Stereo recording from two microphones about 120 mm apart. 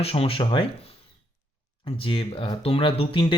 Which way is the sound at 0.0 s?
55° left (ahead or behind).